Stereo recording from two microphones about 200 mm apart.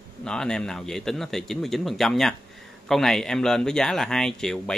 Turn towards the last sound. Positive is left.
turn(degrees=5)  # may be behind; listen again after turning